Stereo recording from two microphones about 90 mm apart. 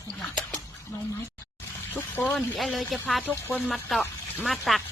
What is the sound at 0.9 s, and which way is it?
A woman's voice, 30° left (ahead or behind).